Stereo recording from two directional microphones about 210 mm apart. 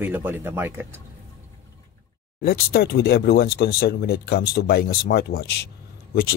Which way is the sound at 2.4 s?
50° left (ahead or behind).